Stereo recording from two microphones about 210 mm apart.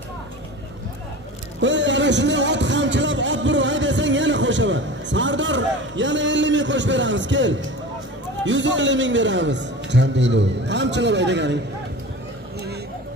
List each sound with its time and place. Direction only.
1.6 s speech: 60° right (ahead or behind)